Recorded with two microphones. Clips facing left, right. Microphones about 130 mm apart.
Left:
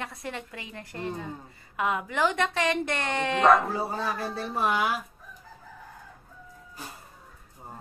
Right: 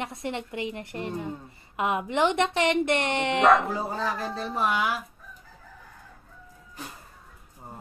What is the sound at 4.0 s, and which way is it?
Speech, 10° left (ahead or behind).